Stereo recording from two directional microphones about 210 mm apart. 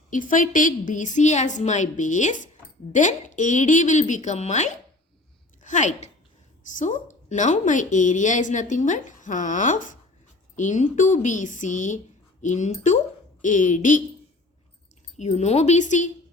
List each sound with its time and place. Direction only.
0.1 s a woman's voice: 40° left (ahead or behind)
15.2 s a woman's voice: 30° left (ahead or behind)